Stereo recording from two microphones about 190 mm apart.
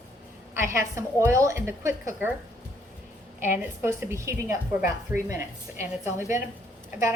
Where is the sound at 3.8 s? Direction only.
15° right (ahead or behind).